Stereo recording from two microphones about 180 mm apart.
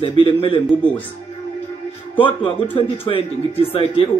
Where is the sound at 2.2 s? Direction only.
25° left (ahead or behind).